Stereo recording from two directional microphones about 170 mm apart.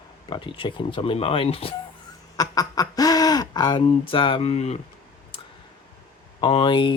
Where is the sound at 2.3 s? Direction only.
20° left (ahead or behind); by 4.8 s 40° left (ahead or behind).